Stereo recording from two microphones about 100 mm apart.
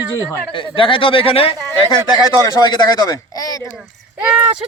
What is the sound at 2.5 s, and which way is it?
Speech, 40° left (ahead or behind).